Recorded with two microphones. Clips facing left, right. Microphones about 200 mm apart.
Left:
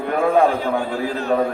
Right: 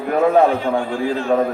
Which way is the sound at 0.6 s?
40° left (ahead or behind).